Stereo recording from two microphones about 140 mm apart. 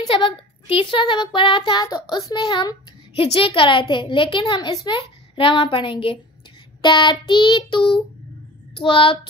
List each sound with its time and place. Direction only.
0.0 s speech: 35° left (ahead or behind)